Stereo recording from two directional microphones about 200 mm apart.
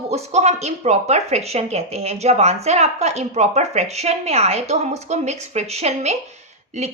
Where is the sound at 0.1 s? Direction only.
35° right (ahead or behind).